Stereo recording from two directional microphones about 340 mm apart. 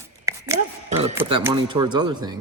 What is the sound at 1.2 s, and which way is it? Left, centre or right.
Speech, centre.